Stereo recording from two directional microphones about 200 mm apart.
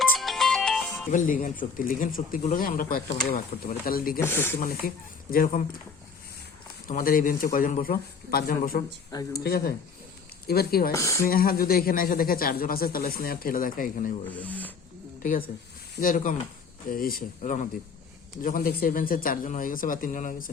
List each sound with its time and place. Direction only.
0.1 s music: centre (ahead or behind)
1.1 s speech: 40° left (ahead or behind)
4.2 s speech: 10° left (ahead or behind)
4.8 s speech: 45° left (ahead or behind)
6.8 s speech: 45° left (ahead or behind)
10.9 s speech: 15° left (ahead or behind)
11.3 s speech: 50° left (ahead or behind)
14.3 s speech: 10° left (ahead or behind)
15.2 s speech: 40° left (ahead or behind)